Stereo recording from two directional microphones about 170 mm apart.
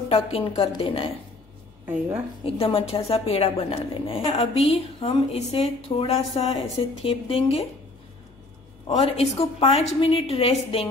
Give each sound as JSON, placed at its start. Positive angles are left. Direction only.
{"t": 0.1, "sound": "a woman's voice", "side_deg": 35}
{"t": 1.9, "sound": "a woman's voice", "side_deg": -15}
{"t": 2.4, "sound": "a woman's voice", "side_deg": 35}
{"t": 8.8, "sound": "a woman's voice", "side_deg": 35}